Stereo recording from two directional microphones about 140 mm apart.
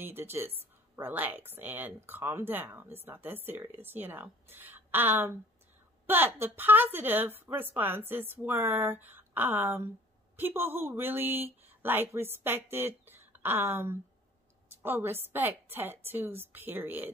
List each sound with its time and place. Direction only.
0.0 s speech: 15° right (ahead or behind)